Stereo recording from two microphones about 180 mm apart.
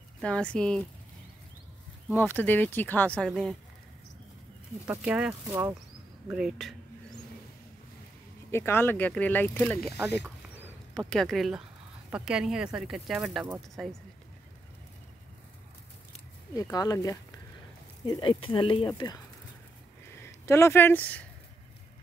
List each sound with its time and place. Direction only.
0.2 s speech: 5° left (ahead or behind)
2.1 s speech: 10° left (ahead or behind)
4.8 s speech: 5° right (ahead or behind)
6.3 s speech: 5° right (ahead or behind)
8.5 s speech: 15° left (ahead or behind)
11.1 s speech: centre (ahead or behind)
16.5 s speech: 20° left (ahead or behind)
20.4 s speech: 15° left (ahead or behind)